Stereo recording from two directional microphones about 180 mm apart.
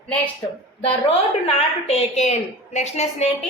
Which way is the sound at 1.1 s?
35° left (ahead or behind).